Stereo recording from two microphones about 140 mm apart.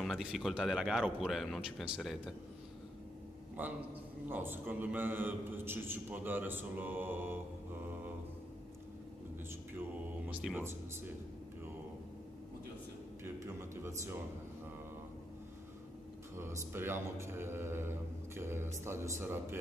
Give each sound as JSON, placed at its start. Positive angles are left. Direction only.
{"t": 0.0, "sound": "speech", "side_deg": 0}
{"t": 3.6, "sound": "speech", "side_deg": -15}
{"t": 7.8, "sound": "mantra", "side_deg": -15}
{"t": 10.5, "sound": "speech", "side_deg": -15}
{"t": 13.2, "sound": "speech", "side_deg": -20}
{"t": 16.3, "sound": "speech", "side_deg": -20}